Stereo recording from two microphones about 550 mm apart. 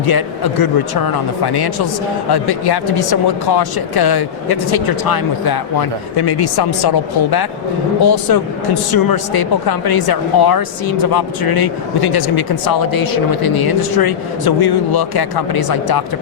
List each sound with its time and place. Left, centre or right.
0.0 s speech: left